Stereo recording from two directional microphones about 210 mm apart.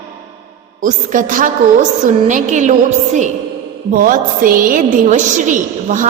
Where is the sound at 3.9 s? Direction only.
40° right (ahead or behind).